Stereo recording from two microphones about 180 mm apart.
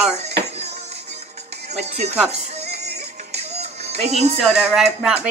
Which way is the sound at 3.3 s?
35° right (ahead or behind).